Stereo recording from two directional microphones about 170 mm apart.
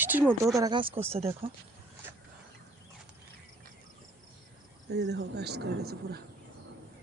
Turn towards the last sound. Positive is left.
turn(degrees=-70)  # may be behind; listen again after turning